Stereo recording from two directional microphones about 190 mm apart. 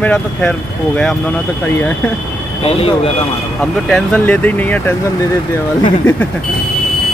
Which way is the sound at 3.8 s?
5° left (ahead or behind).